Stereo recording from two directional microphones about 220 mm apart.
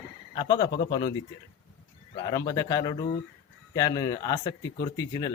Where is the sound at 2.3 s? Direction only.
15° left (ahead or behind).